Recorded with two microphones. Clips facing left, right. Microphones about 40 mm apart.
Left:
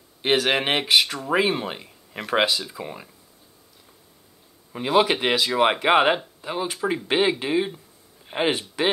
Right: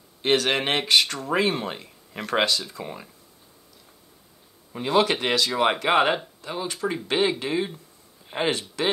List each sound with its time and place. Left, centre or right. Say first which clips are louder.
0.2 s speech: left 1 dB; centre
4.7 s speech: left 2 dB; centre